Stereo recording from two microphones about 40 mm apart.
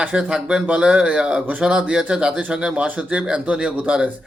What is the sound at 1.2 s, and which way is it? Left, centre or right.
Speech, centre.